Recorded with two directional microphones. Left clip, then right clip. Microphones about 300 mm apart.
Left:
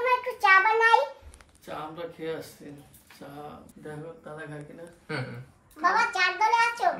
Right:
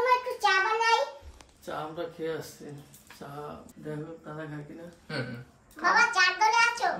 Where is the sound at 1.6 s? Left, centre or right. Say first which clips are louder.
Right 1 dB; centre.